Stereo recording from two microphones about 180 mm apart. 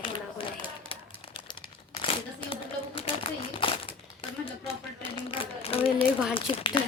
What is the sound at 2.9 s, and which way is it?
Crumpling, 30° left (ahead or behind).